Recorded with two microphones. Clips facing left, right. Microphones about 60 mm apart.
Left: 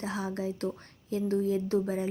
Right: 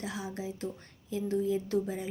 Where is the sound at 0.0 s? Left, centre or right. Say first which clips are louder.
Left 4 dB; left.